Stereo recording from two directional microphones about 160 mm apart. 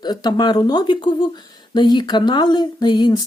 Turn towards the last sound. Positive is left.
turn(degrees=30)  # may be behind; listen again after turning